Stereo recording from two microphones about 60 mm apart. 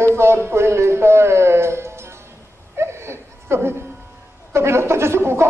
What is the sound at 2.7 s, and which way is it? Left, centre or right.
Laughter, right.